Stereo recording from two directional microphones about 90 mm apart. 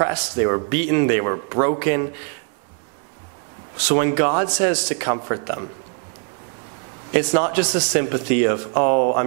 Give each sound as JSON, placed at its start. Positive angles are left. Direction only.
{"t": 0.0, "sound": "a man's voice", "side_deg": -20}
{"t": 3.8, "sound": "a man's voice", "side_deg": -15}
{"t": 7.1, "sound": "a man's voice", "side_deg": -15}